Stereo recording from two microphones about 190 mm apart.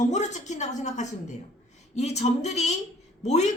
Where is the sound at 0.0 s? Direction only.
40° left (ahead or behind).